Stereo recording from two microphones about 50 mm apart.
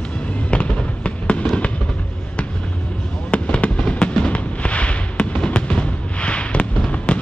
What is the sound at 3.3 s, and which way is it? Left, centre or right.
Fireworks, left.